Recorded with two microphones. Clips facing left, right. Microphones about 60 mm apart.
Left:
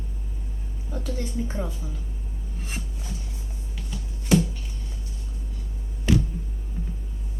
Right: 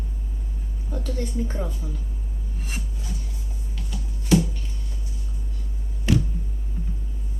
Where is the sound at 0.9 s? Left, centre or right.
Centre.